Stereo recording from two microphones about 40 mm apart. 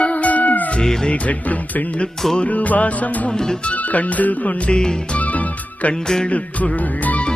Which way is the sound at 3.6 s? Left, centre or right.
Left.